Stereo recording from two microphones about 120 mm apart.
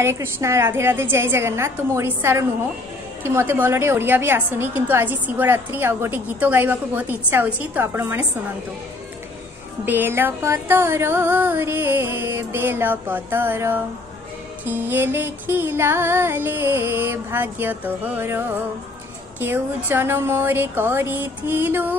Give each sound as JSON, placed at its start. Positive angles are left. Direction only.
{"t": 0.0, "sound": "music", "side_deg": -20}
{"t": 3.3, "sound": "a woman's voice", "side_deg": -20}
{"t": 9.8, "sound": "music", "side_deg": -15}
{"t": 14.6, "sound": "a woman's voice", "side_deg": -15}